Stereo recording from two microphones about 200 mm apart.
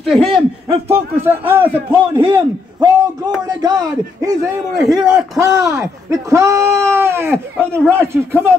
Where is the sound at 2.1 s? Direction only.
25° right (ahead or behind).